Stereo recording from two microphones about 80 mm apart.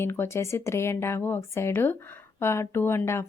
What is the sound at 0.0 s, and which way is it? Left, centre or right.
A woman's voice, left.